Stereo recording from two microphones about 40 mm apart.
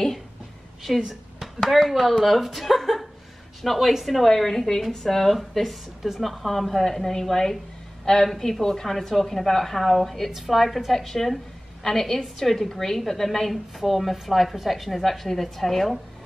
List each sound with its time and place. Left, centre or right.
0.9 s a woman's voice: centre